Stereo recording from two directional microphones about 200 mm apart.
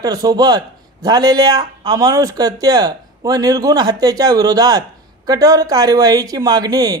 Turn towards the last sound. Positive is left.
turn(degrees=-20)  # may be behind; listen again after turning